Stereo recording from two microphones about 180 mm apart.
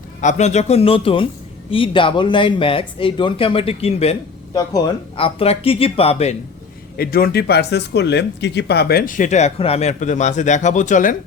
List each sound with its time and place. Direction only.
0.2 s speech: 40° left (ahead or behind)
6.9 s speech: 55° left (ahead or behind)